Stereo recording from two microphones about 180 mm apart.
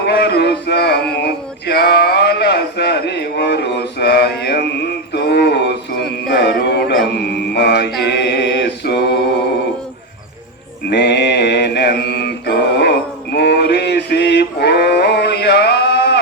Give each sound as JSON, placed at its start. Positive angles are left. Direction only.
{"t": 0.0, "sound": "male singing", "side_deg": 65}
{"t": 7.1, "sound": "music", "side_deg": 70}
{"t": 8.0, "sound": "mantra", "side_deg": 70}
{"t": 10.8, "sound": "mantra", "side_deg": 70}
{"t": 13.3, "sound": "male singing", "side_deg": 65}